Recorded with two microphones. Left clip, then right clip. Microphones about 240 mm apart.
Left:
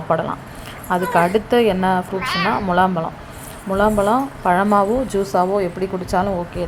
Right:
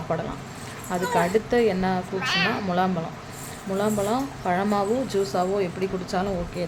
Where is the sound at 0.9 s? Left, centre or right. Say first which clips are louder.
Left 7 dB; centre.